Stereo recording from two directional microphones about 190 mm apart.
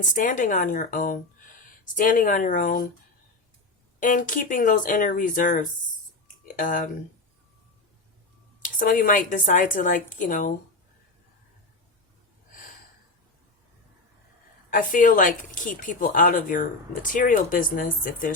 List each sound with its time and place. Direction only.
0.0 s a woman's voice: 45° left (ahead or behind)
4.0 s a woman's voice: 45° left (ahead or behind)
8.6 s a woman's voice: 45° left (ahead or behind)
14.7 s a woman's voice: 45° left (ahead or behind)